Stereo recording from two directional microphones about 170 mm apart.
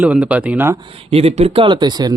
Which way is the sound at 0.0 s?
10° right (ahead or behind).